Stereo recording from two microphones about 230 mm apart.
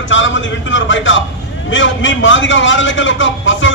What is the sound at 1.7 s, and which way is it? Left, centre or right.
A man's voice, left.